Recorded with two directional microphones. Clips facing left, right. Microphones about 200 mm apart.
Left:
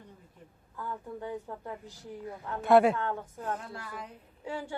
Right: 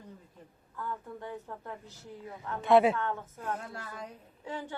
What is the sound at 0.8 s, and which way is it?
A woman's voice, 10° left (ahead or behind).